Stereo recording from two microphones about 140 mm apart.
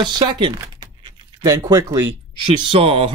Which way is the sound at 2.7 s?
40° right (ahead or behind).